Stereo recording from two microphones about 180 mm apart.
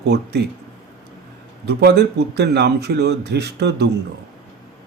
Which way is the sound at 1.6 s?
65° right (ahead or behind).